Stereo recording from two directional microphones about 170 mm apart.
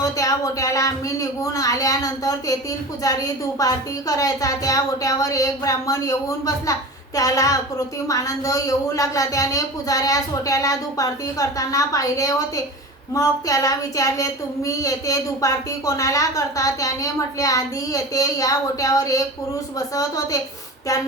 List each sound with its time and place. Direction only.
0.0 s a woman's voice: 20° left (ahead or behind)
4.2 s a woman's voice: 20° left (ahead or behind)